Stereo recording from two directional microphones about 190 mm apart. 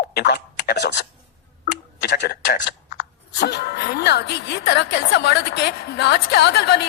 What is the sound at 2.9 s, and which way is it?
Speech, 60° left (ahead or behind).